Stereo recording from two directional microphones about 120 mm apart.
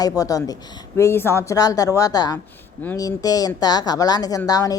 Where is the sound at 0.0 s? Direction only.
30° left (ahead or behind).